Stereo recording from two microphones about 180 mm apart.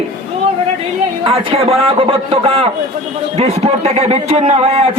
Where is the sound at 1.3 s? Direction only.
35° right (ahead or behind).